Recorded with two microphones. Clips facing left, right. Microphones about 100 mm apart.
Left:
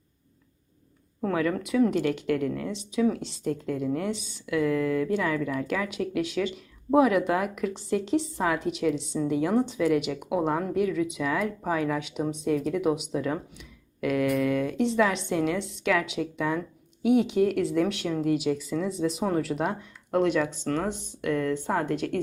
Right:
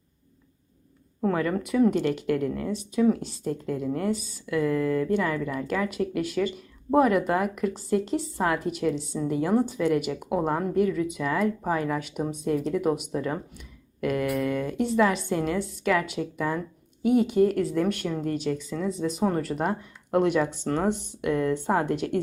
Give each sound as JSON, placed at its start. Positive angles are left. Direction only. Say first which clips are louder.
{"t": 1.2, "sound": "speech", "louder": "right 1 dB", "side_deg": 0}
{"t": 20.1, "sound": "speech", "louder": "right 1 dB", "side_deg": -15}
{"t": 20.9, "sound": "speech", "louder": "right 5 dB", "side_deg": -60}
{"t": 21.2, "sound": "speech", "louder": "left 1 dB", "side_deg": -15}